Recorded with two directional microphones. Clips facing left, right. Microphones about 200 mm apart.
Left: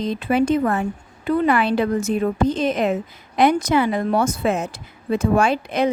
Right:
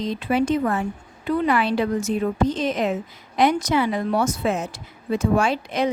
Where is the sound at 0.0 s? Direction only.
55° left (ahead or behind).